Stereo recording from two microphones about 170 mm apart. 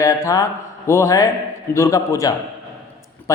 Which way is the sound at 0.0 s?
20° left (ahead or behind).